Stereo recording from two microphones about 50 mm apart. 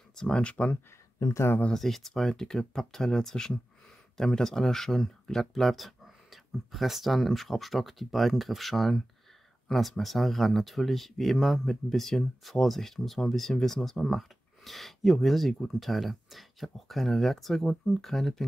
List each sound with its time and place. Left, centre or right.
0.1 s speech: centre
1.7 s speech: centre